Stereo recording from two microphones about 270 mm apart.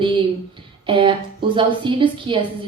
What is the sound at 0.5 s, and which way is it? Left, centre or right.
A woman's voice, centre.